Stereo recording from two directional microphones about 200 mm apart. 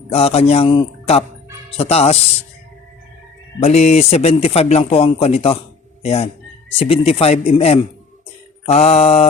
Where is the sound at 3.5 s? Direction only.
35° left (ahead or behind).